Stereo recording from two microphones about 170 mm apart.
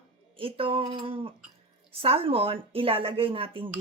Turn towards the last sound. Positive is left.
turn(degrees=-30)  # may be behind; listen again after turning